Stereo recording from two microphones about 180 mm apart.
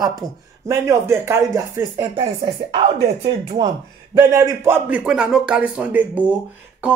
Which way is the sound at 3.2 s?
20° right (ahead or behind).